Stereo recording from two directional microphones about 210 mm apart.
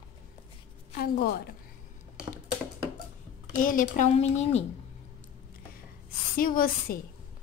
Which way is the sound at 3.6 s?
40° left (ahead or behind).